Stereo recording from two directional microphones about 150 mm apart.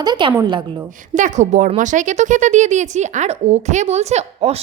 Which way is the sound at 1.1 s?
55° right (ahead or behind).